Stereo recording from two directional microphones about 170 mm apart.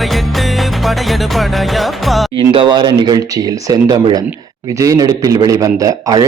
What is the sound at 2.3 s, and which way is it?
A man's voice, 30° right (ahead or behind).